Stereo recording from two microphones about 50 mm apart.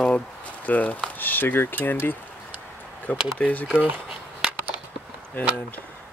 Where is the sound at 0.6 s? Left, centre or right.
Left.